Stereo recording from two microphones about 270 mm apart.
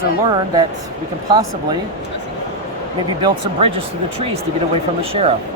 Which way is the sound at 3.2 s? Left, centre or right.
Centre.